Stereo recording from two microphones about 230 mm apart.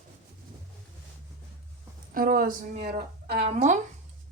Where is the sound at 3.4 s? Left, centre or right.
Right.